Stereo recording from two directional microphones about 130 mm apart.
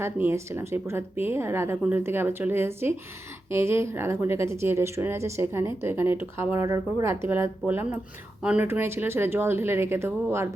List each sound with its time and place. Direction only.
0.0 s a woman's voice: 20° right (ahead or behind)